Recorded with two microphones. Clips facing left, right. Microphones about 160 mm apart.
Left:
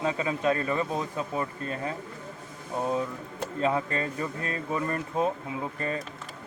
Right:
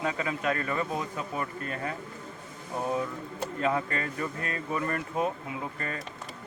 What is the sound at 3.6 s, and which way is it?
A man's voice, 25° left (ahead or behind).